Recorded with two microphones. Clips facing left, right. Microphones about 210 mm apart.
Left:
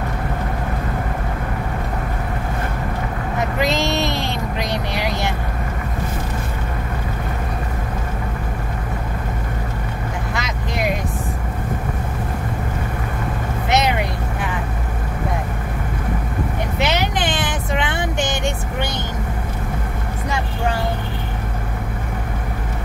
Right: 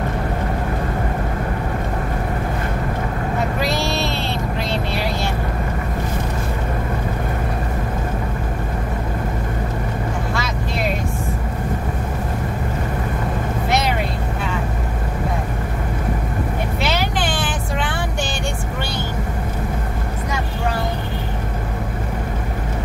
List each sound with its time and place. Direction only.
3.6 s vehicle: 20° left (ahead or behind)
10.3 s vehicle: 15° left (ahead or behind)
13.7 s vehicle: 20° left (ahead or behind)
16.8 s vehicle: 20° left (ahead or behind)